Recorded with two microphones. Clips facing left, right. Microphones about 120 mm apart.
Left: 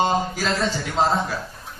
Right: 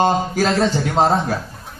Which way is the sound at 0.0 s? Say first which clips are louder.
Right 5 dB; 45° right (ahead or behind).